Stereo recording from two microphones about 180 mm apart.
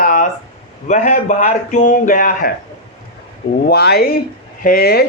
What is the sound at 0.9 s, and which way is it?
A man's voice, 40° left (ahead or behind).